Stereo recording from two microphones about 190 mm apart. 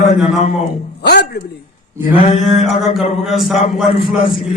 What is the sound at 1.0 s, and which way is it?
Speech, 60° left (ahead or behind).